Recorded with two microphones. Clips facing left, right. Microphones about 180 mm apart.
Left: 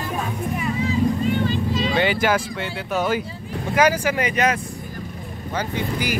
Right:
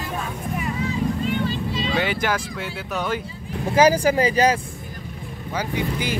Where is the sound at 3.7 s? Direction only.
30° right (ahead or behind).